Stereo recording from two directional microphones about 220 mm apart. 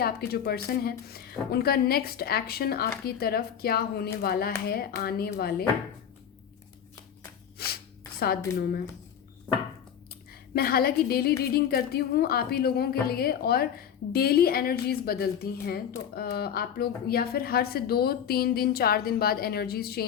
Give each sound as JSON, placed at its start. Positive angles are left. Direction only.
{"t": 0.0, "sound": "a woman's voice", "side_deg": 45}
{"t": 7.6, "sound": "a sound", "side_deg": 45}
{"t": 10.5, "sound": "a woman's voice", "side_deg": 45}